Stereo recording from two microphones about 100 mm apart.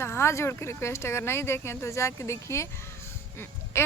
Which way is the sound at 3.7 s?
25° left (ahead or behind).